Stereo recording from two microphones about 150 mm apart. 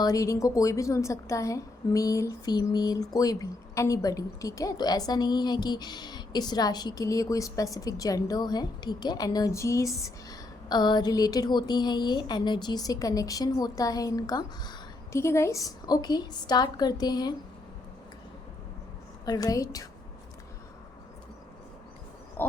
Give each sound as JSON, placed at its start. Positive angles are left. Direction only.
{"t": 0.0, "sound": "a woman's voice", "side_deg": 25}
{"t": 19.2, "sound": "a woman's voice", "side_deg": 25}
{"t": 22.4, "sound": "a sound", "side_deg": 15}